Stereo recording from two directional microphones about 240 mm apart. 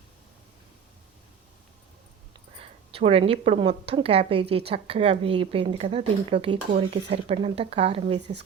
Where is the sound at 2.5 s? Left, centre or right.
Right.